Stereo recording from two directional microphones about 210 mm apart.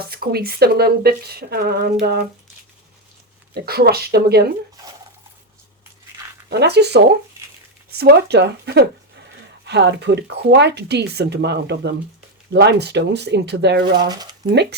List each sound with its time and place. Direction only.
0.1 s speech: 50° right (ahead or behind)
3.5 s speech: 50° right (ahead or behind)
6.5 s speech: 50° right (ahead or behind)
14.1 s speech: 20° right (ahead or behind)
14.5 s speech: 55° right (ahead or behind)